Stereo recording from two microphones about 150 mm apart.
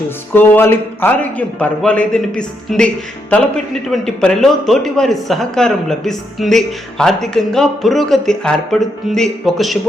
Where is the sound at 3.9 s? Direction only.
5° left (ahead or behind).